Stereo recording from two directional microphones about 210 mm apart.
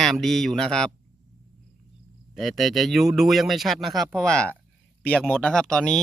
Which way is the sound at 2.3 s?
Centre (ahead or behind).